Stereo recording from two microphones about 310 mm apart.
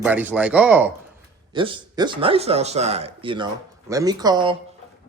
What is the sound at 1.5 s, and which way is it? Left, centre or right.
Speech, centre.